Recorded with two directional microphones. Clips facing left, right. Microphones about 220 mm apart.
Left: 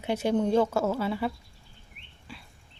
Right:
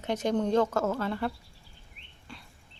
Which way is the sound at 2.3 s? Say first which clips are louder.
Left 1 dB; 5° left (ahead or behind).